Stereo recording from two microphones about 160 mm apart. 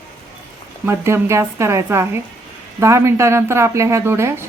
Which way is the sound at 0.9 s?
15° right (ahead or behind).